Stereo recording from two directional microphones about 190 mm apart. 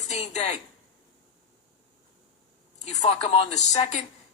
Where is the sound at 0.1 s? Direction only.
35° left (ahead or behind).